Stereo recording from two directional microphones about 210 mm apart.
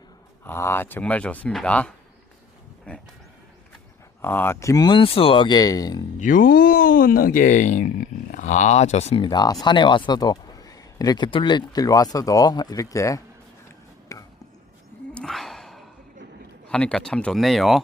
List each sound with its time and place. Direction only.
0.4 s speech: 10° left (ahead or behind)
4.2 s speech: 10° left (ahead or behind)
6.1 s speech: 40° left (ahead or behind); by 13.2 s 15° left (ahead or behind)
14.1 s a sound: 15° left (ahead or behind)
15.1 s a sound: centre (ahead or behind)
16.6 s speech: 5° left (ahead or behind)